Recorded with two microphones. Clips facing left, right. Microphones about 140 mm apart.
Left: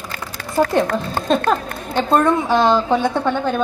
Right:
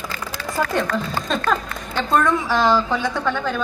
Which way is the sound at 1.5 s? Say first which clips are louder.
Left 3 dB; 30° left (ahead or behind).